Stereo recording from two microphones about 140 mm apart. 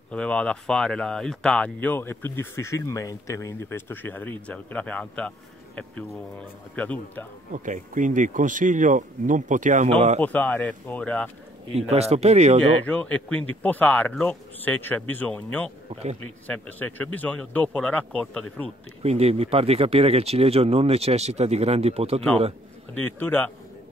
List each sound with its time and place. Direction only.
0.1 s speech: 10° left (ahead or behind)
6.7 s speech: 10° left (ahead or behind)
7.5 s speech: 65° right (ahead or behind)
9.8 s speech: 45° right (ahead or behind)
10.2 s speech: 10° left (ahead or behind)
11.7 s speech: 50° right (ahead or behind)
12.8 s speech: 10° left (ahead or behind)
15.9 s speech: 50° right (ahead or behind)
16.4 s speech: 10° left (ahead or behind)
19.0 s speech: 50° right (ahead or behind)
22.9 s speech: 15° left (ahead or behind)